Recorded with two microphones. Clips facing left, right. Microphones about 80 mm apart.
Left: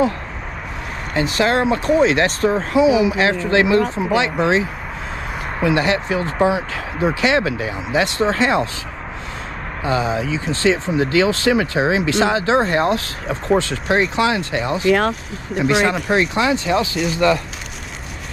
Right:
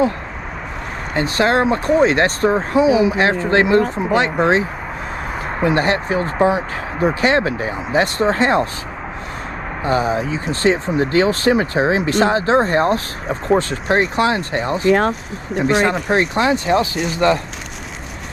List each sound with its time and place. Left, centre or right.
1.1 s speech: right
9.8 s speech: right